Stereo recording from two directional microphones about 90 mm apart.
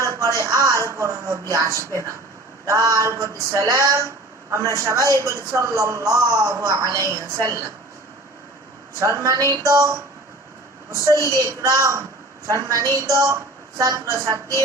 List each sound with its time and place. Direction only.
0.0 s a man's voice: 35° right (ahead or behind)
9.0 s a man's voice: 35° right (ahead or behind)